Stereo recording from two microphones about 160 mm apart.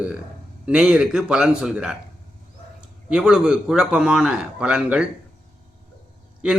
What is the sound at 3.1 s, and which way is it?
A man's voice, 5° right (ahead or behind).